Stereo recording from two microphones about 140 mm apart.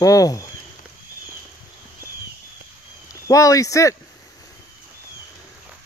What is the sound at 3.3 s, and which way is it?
Speech, 25° left (ahead or behind).